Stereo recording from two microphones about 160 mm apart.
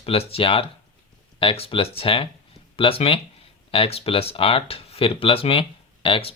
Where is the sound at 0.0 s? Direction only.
40° left (ahead or behind).